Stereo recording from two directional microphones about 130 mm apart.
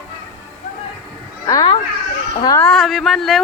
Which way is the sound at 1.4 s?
35° left (ahead or behind).